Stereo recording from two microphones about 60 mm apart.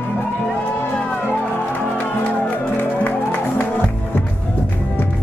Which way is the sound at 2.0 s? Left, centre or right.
Left.